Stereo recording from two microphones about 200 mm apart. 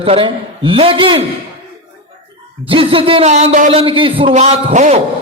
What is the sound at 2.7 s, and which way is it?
A man's voice, 25° right (ahead or behind).